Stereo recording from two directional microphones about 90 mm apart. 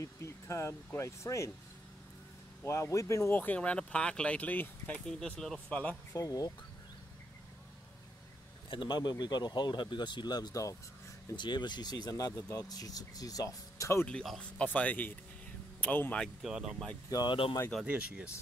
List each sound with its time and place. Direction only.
0.0 s speech: 30° left (ahead or behind)
2.6 s speech: 30° left (ahead or behind)
3.3 s speech: 15° left (ahead or behind)
5.0 s speech: 5° left (ahead or behind)
5.7 s speech: 15° left (ahead or behind)
6.1 s speech: 40° left (ahead or behind)
8.6 s speech: 60° left (ahead or behind); by 14.0 s 35° left (ahead or behind)
14.2 s speech: centre (ahead or behind)
14.6 s speech: 15° left (ahead or behind)
16.4 s speech: 5° right (ahead or behind)
17.1 s speech: 55° left (ahead or behind)
17.8 s speech: 10° right (ahead or behind)